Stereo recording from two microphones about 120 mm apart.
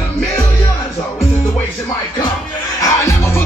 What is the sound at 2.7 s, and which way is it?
Music, 25° left (ahead or behind).